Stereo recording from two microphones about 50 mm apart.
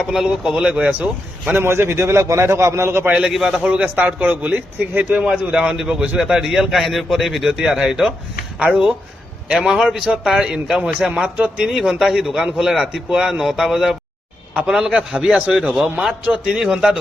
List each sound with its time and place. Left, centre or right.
0.0 s a man's voice: centre
1.6 s a man's voice: right
3.1 s a man's voice: centre
3.6 s a man's voice: right
6.1 s a man's voice: centre
8.5 s speech: right
9.5 s a man's voice: centre
11.1 s a man's voice: right
11.6 s a man's voice: centre